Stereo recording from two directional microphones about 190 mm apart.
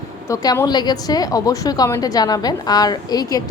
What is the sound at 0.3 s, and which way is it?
A woman's voice, 15° left (ahead or behind).